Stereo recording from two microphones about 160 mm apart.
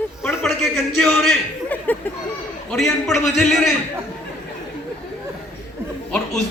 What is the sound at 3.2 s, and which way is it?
Speech, centre (ahead or behind).